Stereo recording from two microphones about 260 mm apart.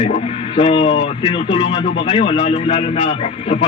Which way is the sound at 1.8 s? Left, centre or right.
Left.